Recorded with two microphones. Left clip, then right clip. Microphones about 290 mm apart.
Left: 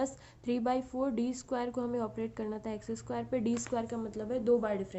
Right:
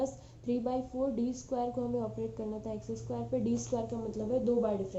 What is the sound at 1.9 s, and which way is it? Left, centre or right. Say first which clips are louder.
A woman's voice: even; left.